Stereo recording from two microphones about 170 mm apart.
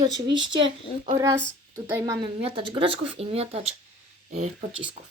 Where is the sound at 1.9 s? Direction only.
20° right (ahead or behind).